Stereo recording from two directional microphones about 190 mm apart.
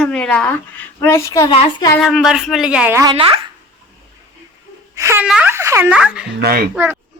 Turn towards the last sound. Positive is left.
turn(degrees=-10)  # may be behind; listen again after turning